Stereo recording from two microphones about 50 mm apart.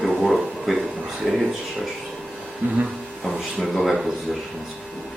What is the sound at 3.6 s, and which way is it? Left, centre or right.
Speech, centre.